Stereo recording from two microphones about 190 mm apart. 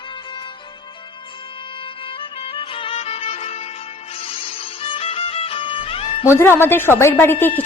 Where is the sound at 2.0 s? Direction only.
25° left (ahead or behind).